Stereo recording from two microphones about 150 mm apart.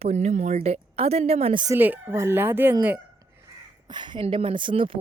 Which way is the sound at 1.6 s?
15° right (ahead or behind).